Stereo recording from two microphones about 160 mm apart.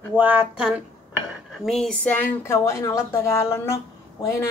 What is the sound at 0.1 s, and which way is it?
Speech, 10° right (ahead or behind).